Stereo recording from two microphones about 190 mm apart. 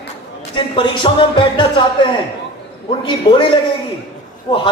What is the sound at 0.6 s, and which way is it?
Speech, 25° left (ahead or behind).